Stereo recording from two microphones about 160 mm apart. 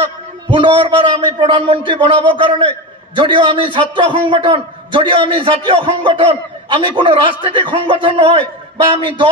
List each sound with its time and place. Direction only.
0.5 s a man's voice: 30° right (ahead or behind)